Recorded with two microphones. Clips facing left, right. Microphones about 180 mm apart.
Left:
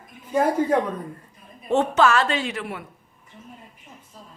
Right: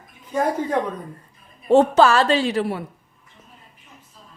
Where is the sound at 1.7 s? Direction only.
35° right (ahead or behind).